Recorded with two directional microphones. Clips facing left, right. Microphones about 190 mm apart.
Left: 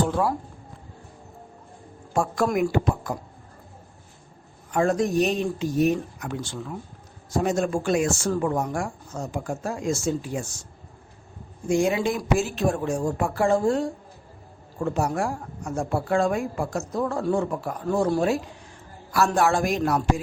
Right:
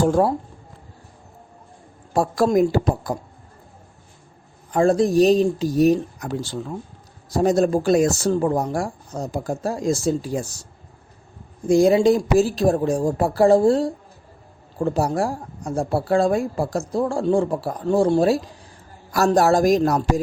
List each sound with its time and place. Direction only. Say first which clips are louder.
0.0 s speech: right 6 dB; 45° right (ahead or behind)
2.1 s speech: right 5 dB; 35° right (ahead or behind)
4.7 s speech: right 5 dB; 35° right (ahead or behind)
11.7 s speech: right 8 dB; 35° right (ahead or behind)